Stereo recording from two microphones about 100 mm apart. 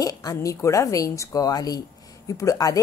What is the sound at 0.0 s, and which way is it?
A woman's voice, 40° left (ahead or behind).